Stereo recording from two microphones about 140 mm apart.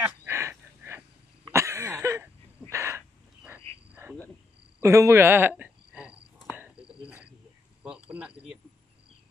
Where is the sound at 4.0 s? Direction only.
20° right (ahead or behind).